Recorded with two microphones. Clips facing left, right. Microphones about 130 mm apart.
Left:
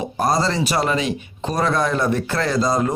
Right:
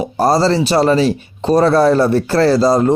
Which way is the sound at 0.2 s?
30° right (ahead or behind).